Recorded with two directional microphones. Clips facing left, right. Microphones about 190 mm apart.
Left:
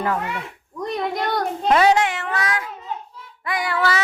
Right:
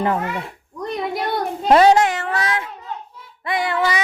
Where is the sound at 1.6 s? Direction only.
35° right (ahead or behind).